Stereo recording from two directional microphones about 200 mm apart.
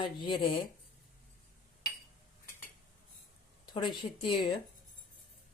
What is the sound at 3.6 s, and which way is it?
Speech, 25° left (ahead or behind).